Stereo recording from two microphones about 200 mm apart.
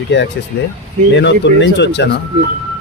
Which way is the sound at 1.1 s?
60° left (ahead or behind).